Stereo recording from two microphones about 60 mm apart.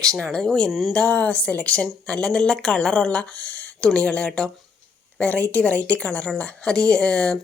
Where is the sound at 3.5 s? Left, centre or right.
Left.